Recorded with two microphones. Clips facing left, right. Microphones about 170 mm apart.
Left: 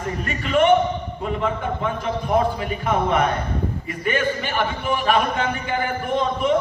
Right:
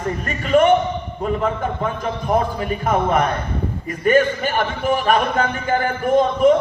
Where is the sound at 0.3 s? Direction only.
40° right (ahead or behind).